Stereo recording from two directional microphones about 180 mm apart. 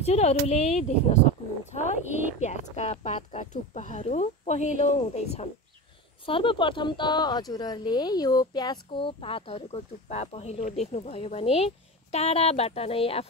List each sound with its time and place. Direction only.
0.0 s speech: 35° left (ahead or behind)
2.4 s speech: 40° left (ahead or behind)